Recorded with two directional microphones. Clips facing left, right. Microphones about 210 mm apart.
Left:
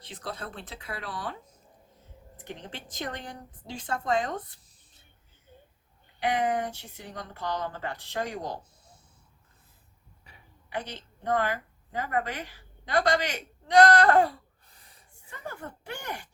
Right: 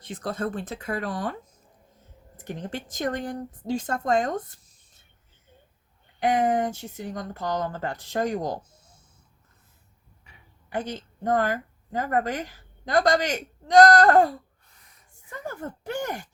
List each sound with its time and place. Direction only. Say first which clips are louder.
0.0 s speech: right 9 dB; 45° right (ahead or behind)
2.4 s speech: right 7 dB; 45° right (ahead or behind)
6.1 s speech: right 5 dB; 45° right (ahead or behind)
10.7 s a woman's voice: right 5 dB; 45° right (ahead or behind)
14.7 s gasp: left 1 dB; 30° left (ahead or behind)
15.3 s speech: right 5 dB; 40° right (ahead or behind)